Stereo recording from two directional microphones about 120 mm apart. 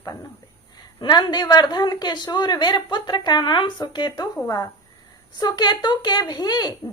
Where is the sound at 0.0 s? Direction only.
30° left (ahead or behind).